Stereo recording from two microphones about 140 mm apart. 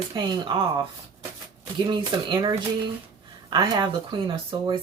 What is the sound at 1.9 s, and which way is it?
A woman's voice, 30° right (ahead or behind).